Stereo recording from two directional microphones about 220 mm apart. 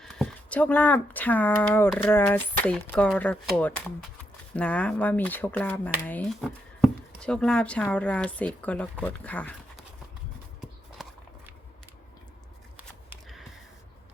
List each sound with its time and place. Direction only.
0.0 s speech: centre (ahead or behind)
11.0 s walk: centre (ahead or behind)
12.7 s a sound: 5° right (ahead or behind)